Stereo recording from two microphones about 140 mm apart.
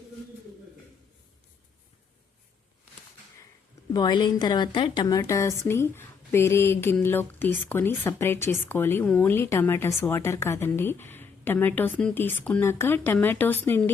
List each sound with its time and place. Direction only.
3.9 s a woman's voice: 30° left (ahead or behind); by 13.9 s 15° left (ahead or behind)